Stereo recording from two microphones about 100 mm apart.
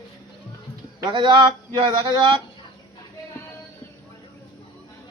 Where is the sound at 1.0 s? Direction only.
50° right (ahead or behind).